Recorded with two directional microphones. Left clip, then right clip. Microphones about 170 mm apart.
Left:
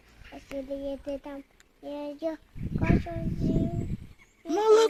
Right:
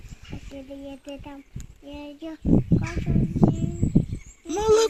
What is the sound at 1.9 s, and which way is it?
Child singing, 60° left (ahead or behind).